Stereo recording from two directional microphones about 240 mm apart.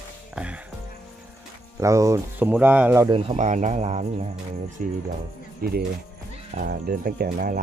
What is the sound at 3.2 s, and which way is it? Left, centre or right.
Speech, right.